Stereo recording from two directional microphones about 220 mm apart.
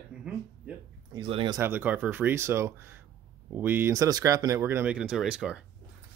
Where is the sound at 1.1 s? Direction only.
25° right (ahead or behind); by 5.6 s 5° right (ahead or behind).